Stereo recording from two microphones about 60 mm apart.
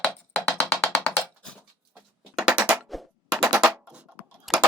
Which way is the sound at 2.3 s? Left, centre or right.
Centre.